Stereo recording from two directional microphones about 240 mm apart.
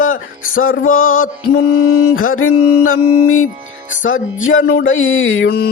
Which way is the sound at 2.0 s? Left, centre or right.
Left.